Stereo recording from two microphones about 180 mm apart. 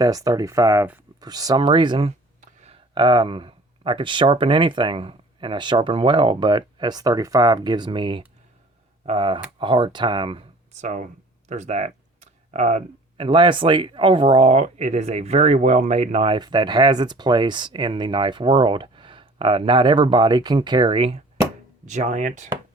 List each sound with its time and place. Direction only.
0.0 s speech: 20° right (ahead or behind)
21.8 s speech: 40° right (ahead or behind)